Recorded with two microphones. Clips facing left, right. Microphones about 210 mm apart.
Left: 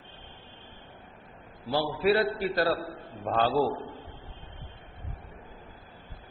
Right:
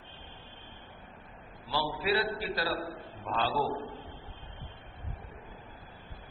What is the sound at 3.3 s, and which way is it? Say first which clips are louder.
Speech: left 6 dB; 50° left (ahead or behind).